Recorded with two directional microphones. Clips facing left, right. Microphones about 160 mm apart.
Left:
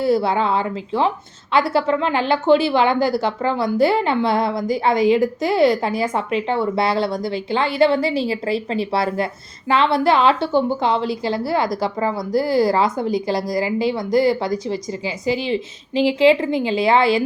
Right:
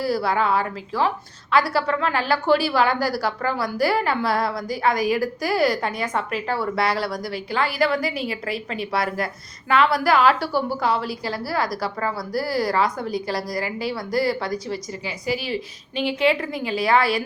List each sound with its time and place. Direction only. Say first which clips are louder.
0.0 s a woman's voice: left 4 dB; 25° left (ahead or behind)